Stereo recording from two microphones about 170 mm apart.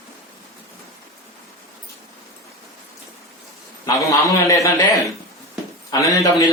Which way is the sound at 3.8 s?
20° left (ahead or behind).